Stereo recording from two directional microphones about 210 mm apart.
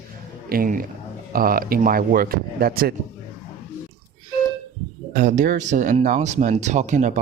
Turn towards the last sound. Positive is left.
turn(degrees=-35)  # may be behind; listen again after turning